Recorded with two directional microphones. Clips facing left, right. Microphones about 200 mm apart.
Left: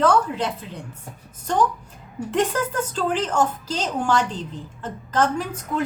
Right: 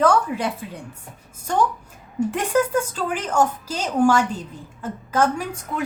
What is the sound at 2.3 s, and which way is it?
A woman's voice, 10° right (ahead or behind).